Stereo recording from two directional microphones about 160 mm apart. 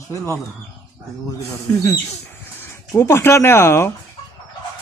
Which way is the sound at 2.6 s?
15° left (ahead or behind).